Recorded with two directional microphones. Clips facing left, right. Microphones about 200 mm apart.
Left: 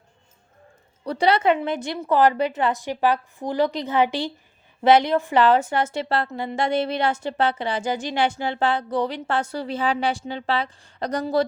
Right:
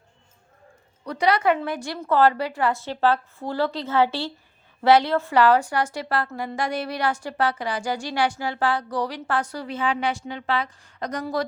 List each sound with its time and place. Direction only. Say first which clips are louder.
1.0 s a woman's voice: left 2 dB; 30° left (ahead or behind)